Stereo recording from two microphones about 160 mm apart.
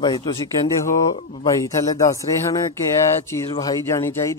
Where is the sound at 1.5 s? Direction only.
20° left (ahead or behind).